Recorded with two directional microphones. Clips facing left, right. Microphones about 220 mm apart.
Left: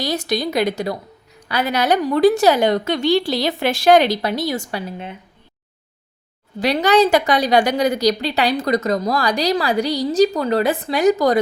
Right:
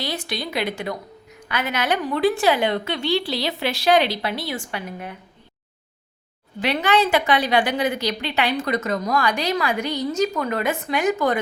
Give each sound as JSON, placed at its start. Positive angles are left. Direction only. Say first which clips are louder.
{"t": 0.0, "sound": "a woman's voice", "louder": "left 7 dB", "side_deg": 40}
{"t": 6.6, "sound": "a woman's voice", "louder": "left 5 dB", "side_deg": 40}